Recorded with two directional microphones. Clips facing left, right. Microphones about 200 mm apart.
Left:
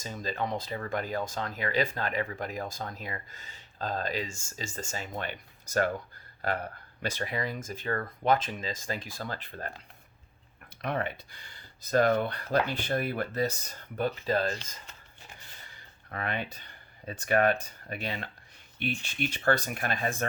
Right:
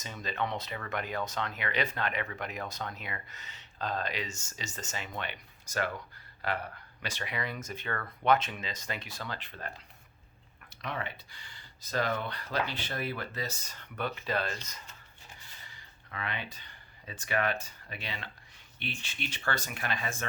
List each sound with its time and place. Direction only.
0.1 s speech: 40° left (ahead or behind)
7.0 s speech: 45° left (ahead or behind)
10.8 s speech: 50° left (ahead or behind)
13.9 s speech: 40° left (ahead or behind)
16.0 s speech: 50° left (ahead or behind)